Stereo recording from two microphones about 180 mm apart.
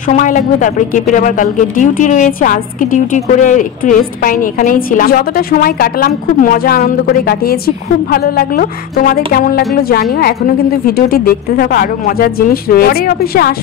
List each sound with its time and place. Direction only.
0.1 s speech: 45° left (ahead or behind)